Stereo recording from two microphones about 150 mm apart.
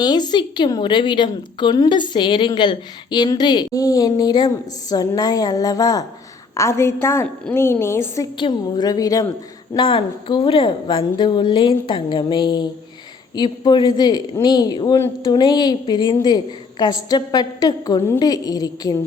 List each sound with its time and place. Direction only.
0.0 s a woman's voice: 30° left (ahead or behind)
8.4 s a woman's voice: 30° left (ahead or behind)